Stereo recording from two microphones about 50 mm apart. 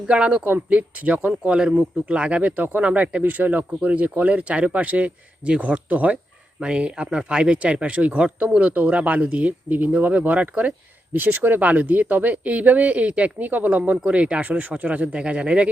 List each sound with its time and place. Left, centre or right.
0.1 s speech: right
11.1 s speech: right